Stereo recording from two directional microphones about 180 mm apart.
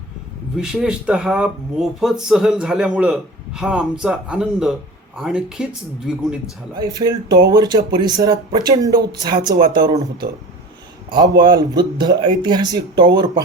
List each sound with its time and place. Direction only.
0.5 s speech: 5° right (ahead or behind)
6.7 s speech: 20° right (ahead or behind)